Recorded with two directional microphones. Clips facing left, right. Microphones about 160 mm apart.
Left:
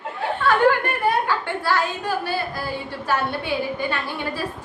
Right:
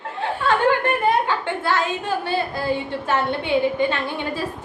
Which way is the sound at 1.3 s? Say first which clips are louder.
Right 1 dB; 20° right (ahead or behind).